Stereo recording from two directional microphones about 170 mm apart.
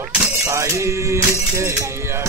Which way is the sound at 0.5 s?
15° right (ahead or behind).